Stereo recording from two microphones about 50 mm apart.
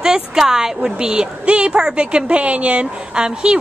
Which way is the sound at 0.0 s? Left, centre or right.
Centre.